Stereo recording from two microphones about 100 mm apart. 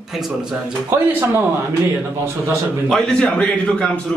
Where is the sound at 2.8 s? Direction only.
5° left (ahead or behind).